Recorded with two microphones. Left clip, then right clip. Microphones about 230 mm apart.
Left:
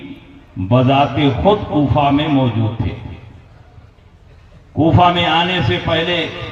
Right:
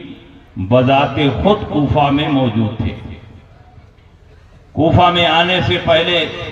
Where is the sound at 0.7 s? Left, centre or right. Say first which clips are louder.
Right 2 dB; right.